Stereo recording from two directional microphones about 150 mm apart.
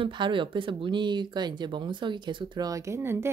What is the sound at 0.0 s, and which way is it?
A woman's voice, 30° right (ahead or behind).